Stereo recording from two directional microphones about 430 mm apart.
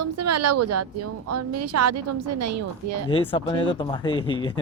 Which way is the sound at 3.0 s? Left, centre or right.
Centre.